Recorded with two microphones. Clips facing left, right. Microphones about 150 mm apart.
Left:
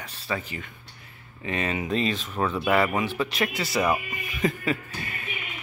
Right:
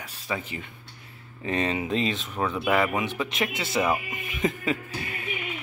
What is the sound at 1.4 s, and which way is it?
Speech, 30° right (ahead or behind).